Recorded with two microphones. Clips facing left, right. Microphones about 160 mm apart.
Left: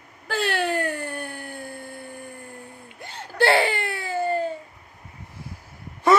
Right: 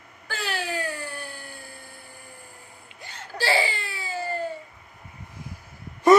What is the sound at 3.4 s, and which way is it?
Baby cry, 60° left (ahead or behind).